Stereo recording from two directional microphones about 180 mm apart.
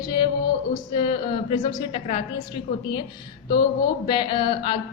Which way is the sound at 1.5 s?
30° left (ahead or behind).